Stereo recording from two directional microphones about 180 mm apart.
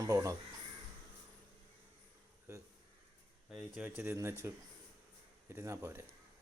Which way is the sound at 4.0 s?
15° right (ahead or behind).